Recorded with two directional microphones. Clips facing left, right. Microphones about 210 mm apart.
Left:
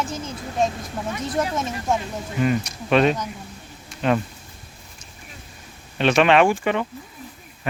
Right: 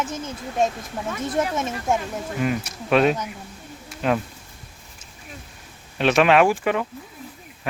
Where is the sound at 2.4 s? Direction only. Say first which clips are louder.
Left 4 dB; 5° right (ahead or behind).